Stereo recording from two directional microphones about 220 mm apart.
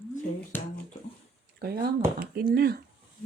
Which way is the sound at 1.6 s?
45° right (ahead or behind).